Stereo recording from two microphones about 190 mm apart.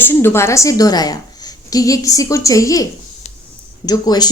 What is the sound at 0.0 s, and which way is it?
Speech, 10° left (ahead or behind).